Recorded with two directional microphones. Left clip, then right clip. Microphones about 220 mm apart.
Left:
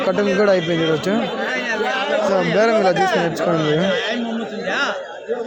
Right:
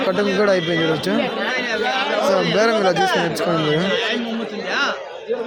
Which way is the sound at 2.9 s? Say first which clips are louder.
Left 1 dB; 10° left (ahead or behind).